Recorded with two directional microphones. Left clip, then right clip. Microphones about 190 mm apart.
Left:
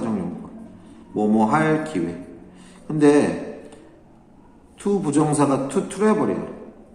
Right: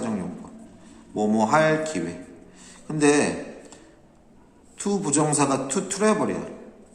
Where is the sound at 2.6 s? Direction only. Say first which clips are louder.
Left 4 dB; 15° right (ahead or behind).